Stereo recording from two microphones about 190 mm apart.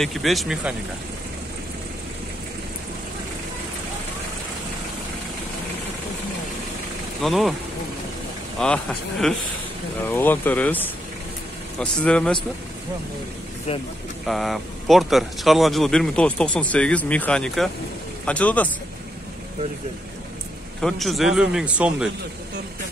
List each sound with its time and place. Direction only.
0.0 s speech: centre (ahead or behind)
7.2 s speech: centre (ahead or behind)
8.5 s speech: 5° left (ahead or behind)
13.7 s speech: 30° left (ahead or behind)
14.2 s speech: centre (ahead or behind)
20.8 s speech: centre (ahead or behind)